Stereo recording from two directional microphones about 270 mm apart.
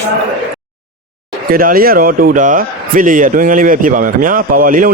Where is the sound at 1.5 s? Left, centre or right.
Right.